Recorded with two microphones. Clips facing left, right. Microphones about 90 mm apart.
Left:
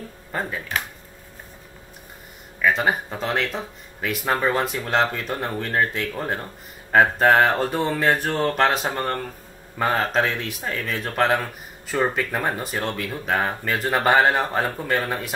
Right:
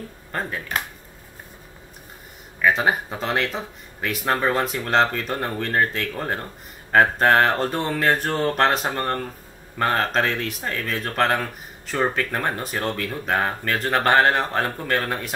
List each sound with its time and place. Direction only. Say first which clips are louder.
0.3 s speech: left 1 dB; 5° left (ahead or behind)
2.6 s speech: right 1 dB; centre (ahead or behind)